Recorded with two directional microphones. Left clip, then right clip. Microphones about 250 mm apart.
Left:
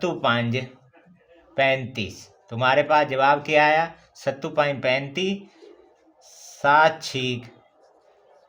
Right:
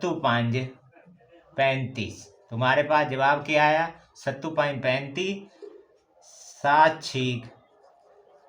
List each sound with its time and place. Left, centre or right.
0.0 s a man's voice: left